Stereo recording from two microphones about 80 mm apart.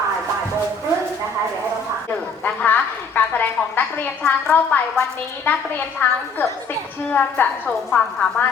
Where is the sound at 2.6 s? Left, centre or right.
Left.